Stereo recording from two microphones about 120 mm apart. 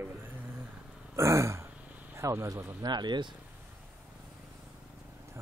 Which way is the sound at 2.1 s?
25° right (ahead or behind).